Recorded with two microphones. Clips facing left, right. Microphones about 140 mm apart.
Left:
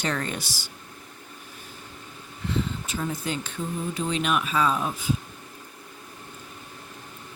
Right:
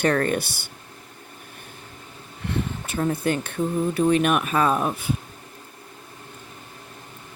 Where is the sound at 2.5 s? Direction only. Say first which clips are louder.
Right 1 dB; 60° right (ahead or behind).